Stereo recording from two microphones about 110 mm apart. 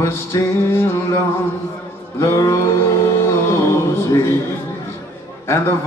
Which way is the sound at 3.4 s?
25° left (ahead or behind).